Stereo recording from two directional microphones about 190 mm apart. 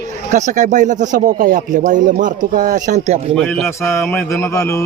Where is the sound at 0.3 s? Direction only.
40° right (ahead or behind).